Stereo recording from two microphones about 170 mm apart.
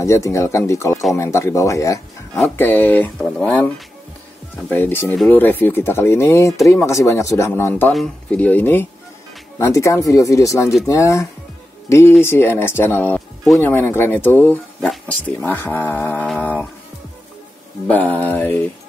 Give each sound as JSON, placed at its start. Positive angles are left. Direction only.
{"t": 0.0, "sound": "speech", "side_deg": 15}
{"t": 4.6, "sound": "speech", "side_deg": 10}
{"t": 7.9, "sound": "speech", "side_deg": 5}
{"t": 17.8, "sound": "speech", "side_deg": 10}